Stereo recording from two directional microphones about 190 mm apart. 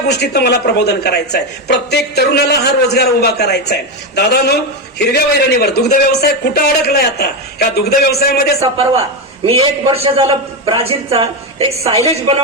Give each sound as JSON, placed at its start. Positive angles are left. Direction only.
{"t": 0.2, "sound": "a woman's voice", "side_deg": 60}
{"t": 9.4, "sound": "a man's voice", "side_deg": -30}